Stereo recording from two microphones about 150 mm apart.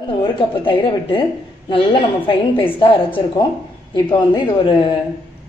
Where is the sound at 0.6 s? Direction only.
35° left (ahead or behind).